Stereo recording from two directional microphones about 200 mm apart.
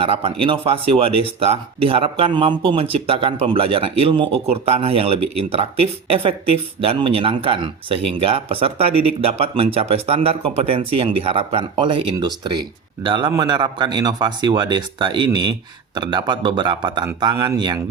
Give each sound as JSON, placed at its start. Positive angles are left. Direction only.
{"t": 0.0, "sound": "speech", "side_deg": -30}